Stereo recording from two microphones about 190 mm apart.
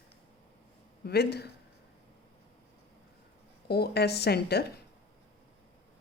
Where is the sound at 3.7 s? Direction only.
55° left (ahead or behind).